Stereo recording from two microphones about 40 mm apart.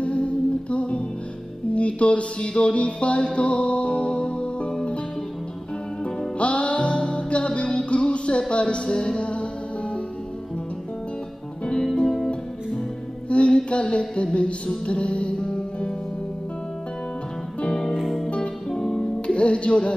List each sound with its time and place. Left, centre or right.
0.0 s music: left
6.3 s music: left
11.6 s music: centre
13.3 s music: left
13.7 s a sound: left
14.9 s music: left
17.6 s music: centre
17.9 s music: centre
18.7 s music: centre
19.2 s music: left